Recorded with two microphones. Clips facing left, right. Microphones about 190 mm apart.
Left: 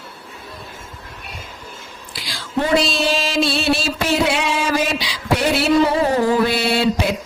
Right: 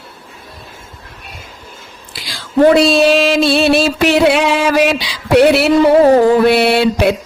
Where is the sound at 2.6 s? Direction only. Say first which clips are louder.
Right 10 dB; 60° right (ahead or behind).